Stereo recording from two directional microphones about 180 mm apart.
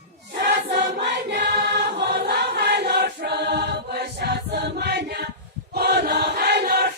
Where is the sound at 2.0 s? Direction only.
65° right (ahead or behind).